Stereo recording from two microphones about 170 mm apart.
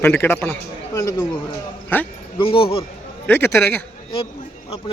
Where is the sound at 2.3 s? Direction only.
30° left (ahead or behind).